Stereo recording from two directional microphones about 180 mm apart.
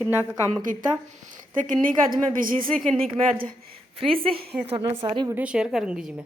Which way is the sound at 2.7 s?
5° left (ahead or behind).